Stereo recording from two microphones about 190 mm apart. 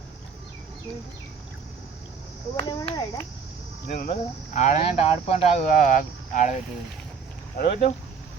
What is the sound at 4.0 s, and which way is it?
Speech, 40° left (ahead or behind).